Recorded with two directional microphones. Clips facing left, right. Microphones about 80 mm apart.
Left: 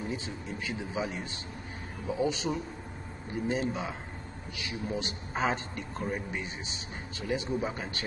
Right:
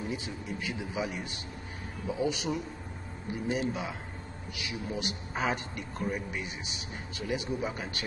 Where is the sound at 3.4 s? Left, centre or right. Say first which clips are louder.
Left 1 dB; left.